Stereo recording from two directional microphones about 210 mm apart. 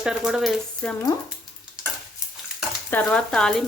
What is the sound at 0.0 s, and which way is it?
Speech, 5° right (ahead or behind).